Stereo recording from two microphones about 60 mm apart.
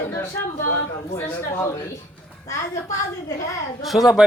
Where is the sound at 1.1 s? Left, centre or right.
Left.